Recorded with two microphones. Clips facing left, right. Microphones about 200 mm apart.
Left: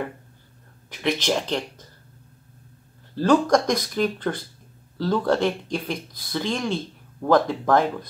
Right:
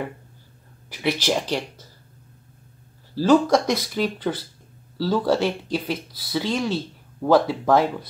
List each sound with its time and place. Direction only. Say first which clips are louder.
0.8 s speech: even; 5° right (ahead or behind)
3.2 s speech: right 1 dB; 5° right (ahead or behind)